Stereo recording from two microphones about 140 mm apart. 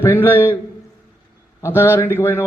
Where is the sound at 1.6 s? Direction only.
15° left (ahead or behind).